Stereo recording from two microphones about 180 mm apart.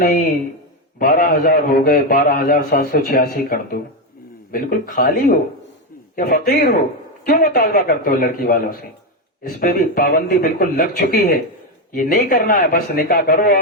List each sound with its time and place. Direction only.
0.0 s a man's voice: 55° left (ahead or behind)